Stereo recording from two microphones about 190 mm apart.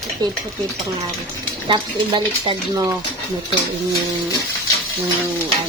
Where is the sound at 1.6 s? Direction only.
25° right (ahead or behind).